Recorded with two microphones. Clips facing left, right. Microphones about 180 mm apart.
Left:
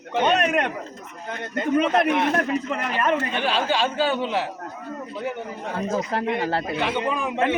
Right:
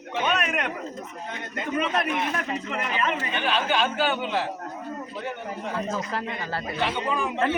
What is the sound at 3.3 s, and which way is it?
Speech, 30° left (ahead or behind).